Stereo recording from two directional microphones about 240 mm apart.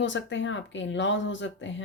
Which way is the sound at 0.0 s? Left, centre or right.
Left.